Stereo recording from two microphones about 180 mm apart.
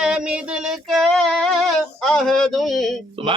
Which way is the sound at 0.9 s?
5° left (ahead or behind).